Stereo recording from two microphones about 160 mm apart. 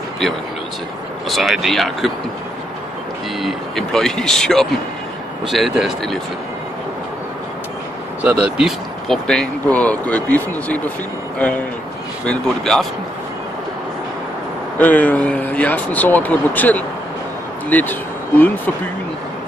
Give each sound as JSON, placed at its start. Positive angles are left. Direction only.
{"t": 1.3, "sound": "speech", "side_deg": 0}
{"t": 3.3, "sound": "speech", "side_deg": 0}
{"t": 8.2, "sound": "speech", "side_deg": -10}
{"t": 14.8, "sound": "speech", "side_deg": 10}